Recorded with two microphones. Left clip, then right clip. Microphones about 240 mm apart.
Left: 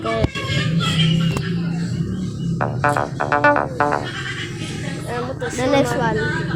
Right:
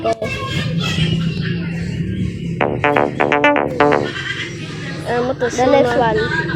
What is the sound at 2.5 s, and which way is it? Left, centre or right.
Music, centre.